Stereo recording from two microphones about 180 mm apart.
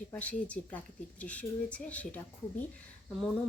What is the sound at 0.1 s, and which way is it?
Speech, 10° left (ahead or behind).